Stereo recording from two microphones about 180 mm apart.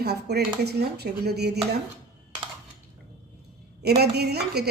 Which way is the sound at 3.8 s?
65° right (ahead or behind).